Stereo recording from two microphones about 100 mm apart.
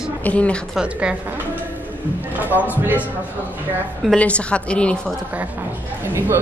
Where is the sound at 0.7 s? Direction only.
10° right (ahead or behind).